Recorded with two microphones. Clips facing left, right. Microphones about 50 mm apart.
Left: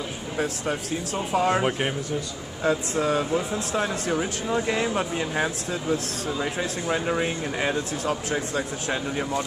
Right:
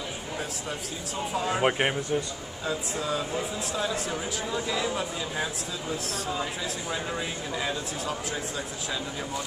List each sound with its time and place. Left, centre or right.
0.4 s speech: left
1.6 s a man's voice: centre
2.6 s speech: left